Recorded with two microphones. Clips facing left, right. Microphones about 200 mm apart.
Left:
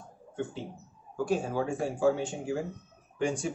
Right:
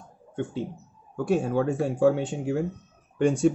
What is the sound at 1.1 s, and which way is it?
Speech, 60° right (ahead or behind).